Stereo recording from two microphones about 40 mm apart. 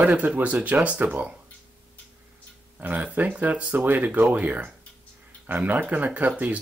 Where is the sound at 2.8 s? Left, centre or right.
Right.